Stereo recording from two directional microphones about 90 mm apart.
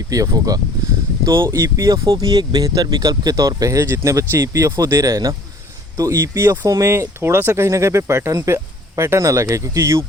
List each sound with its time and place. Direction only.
0.1 s speech: 40° right (ahead or behind)